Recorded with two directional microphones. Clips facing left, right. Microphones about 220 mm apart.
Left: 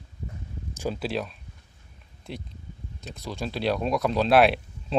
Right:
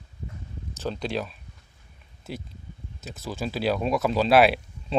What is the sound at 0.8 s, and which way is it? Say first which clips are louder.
Speech: even; 5° left (ahead or behind).